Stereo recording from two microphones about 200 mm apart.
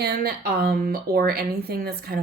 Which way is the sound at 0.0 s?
50° right (ahead or behind).